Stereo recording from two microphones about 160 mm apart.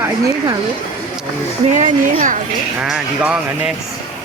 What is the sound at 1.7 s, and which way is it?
Speech, 55° right (ahead or behind).